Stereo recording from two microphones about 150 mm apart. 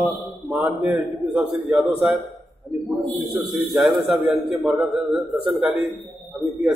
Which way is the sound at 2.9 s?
10° right (ahead or behind).